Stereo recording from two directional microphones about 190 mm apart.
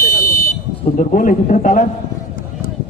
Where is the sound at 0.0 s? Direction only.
45° left (ahead or behind).